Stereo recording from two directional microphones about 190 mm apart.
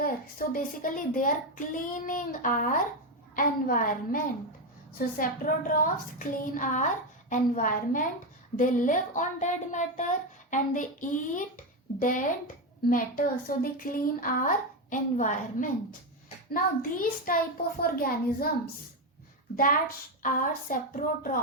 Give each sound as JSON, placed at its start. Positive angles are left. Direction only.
{"t": 0.0, "sound": "speech", "side_deg": 50}
{"t": 20.2, "sound": "speech", "side_deg": 45}